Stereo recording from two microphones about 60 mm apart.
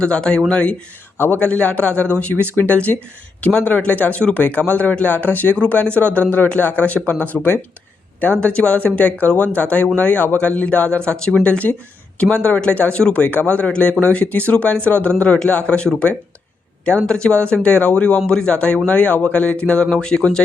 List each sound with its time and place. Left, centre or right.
0.0 s speech: centre
8.4 s speech: centre